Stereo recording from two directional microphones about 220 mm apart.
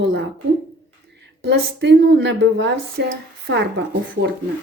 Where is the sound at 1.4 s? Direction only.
50° right (ahead or behind).